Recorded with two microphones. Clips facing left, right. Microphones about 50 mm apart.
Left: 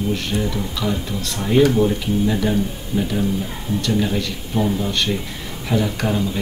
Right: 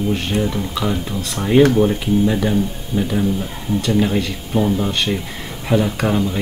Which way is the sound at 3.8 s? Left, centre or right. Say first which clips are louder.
Right 3 dB; right.